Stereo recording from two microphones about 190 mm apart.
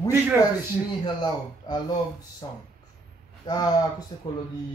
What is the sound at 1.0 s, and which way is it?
Speech, 25° left (ahead or behind).